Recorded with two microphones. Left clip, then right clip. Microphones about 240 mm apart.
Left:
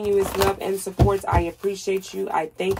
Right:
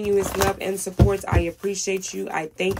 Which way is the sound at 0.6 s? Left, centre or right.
Right.